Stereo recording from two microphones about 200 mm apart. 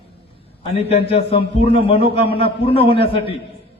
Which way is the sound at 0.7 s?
30° left (ahead or behind).